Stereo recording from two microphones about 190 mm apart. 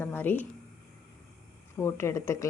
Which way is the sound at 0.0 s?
10° left (ahead or behind).